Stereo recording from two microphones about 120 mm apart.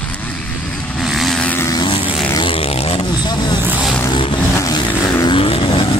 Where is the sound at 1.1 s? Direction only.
Centre (ahead or behind).